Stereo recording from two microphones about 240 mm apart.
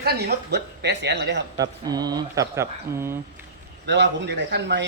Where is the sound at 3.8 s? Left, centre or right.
Right.